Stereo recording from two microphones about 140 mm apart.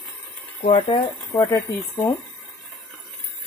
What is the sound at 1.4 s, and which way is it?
Speech, 25° left (ahead or behind).